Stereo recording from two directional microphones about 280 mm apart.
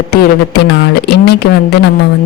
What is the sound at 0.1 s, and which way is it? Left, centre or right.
Speech, left.